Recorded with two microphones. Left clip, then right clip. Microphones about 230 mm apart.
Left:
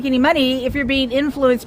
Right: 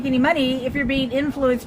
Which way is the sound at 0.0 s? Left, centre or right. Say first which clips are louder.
Left 3 dB; left.